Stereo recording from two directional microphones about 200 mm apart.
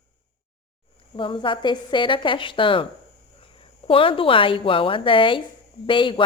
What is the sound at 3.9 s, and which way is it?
A woman's voice, 25° left (ahead or behind).